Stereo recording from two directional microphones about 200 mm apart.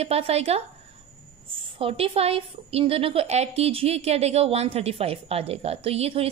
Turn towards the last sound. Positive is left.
turn(degrees=-30)  # may be behind; listen again after turning